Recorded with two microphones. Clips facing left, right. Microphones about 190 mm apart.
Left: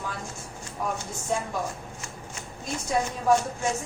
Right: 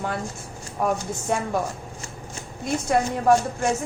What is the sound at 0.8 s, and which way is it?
Speech, 60° right (ahead or behind).